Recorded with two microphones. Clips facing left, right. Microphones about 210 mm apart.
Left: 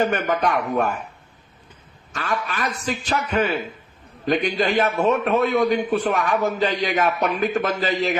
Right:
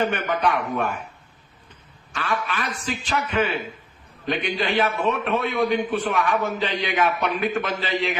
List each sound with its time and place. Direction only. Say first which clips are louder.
0.0 s a man's voice: left 2 dB; 40° left (ahead or behind)
2.1 s a man's voice: left 1 dB; 40° left (ahead or behind)